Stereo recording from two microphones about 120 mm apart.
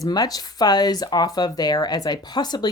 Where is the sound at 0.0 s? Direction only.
35° left (ahead or behind).